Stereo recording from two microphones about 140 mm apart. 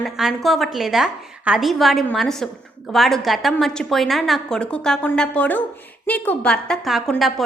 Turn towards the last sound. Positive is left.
turn(degrees=0)  # may be behind; listen again after turning